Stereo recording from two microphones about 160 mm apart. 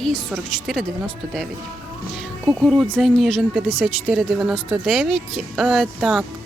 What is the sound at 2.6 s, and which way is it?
Speech, centre (ahead or behind).